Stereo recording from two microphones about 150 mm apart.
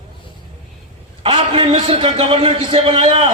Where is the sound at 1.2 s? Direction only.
40° right (ahead or behind).